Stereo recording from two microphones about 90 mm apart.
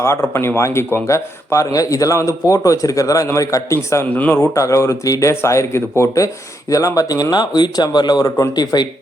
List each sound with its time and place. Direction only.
0.0 s a man's voice: 30° left (ahead or behind)
4.1 s a man's voice: 20° left (ahead or behind); by 8.9 s 50° left (ahead or behind)